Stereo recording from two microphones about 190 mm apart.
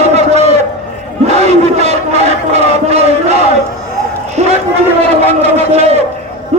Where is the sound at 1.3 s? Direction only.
35° right (ahead or behind).